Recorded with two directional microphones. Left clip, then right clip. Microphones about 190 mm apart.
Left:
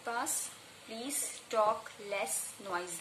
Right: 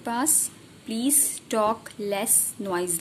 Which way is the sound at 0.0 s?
55° right (ahead or behind).